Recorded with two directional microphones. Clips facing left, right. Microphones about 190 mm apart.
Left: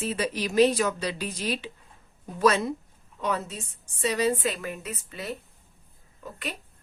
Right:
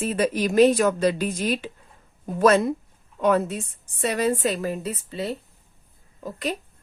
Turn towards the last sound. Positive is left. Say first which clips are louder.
# right 8 dB
turn(degrees=-40)  # may be behind; listen again after turning